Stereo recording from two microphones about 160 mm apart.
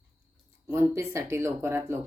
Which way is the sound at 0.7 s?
15° right (ahead or behind).